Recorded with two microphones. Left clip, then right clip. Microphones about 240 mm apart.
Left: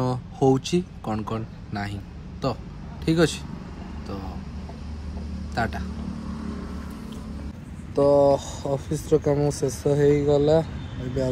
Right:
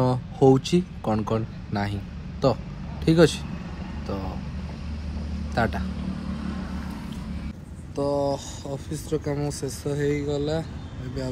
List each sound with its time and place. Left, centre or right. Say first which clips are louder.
0.0 s speech: right 3 dB; centre
5.5 s a man's voice: right 2 dB; centre
7.9 s speech: left 7 dB; centre